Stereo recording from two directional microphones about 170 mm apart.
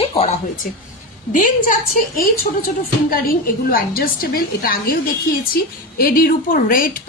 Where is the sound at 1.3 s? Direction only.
50° left (ahead or behind).